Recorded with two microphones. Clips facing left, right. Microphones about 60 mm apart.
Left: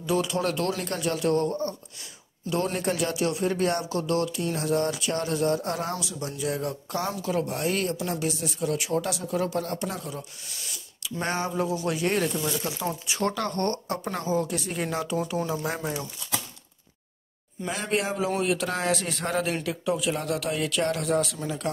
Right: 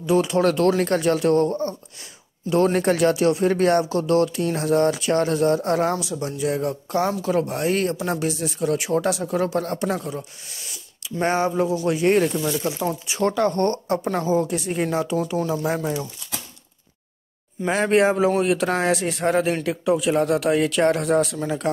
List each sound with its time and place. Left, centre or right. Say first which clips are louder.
0.0 s a woman's voice: right 6 dB; right
0.4 s speech: right 9 dB; right
4.0 s speech: right 7 dB; right
5.9 s speech: right 6 dB; right
7.0 s speech: right 7 dB; right
11.2 s a woman's voice: right 7 dB; right
12.6 s a woman's voice: right 5 dB; centre
14.9 s speech: right 5 dB; centre
17.6 s speech: right 10 dB; right
18.9 s speech: right 6 dB; centre
19.3 s speech: right 6 dB; right